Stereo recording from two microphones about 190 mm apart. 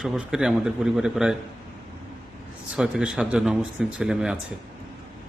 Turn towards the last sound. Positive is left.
turn(degrees=-5)  # may be behind; listen again after turning